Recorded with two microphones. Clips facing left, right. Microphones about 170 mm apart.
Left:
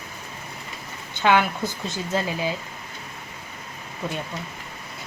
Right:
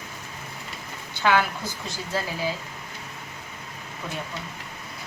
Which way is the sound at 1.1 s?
20° left (ahead or behind).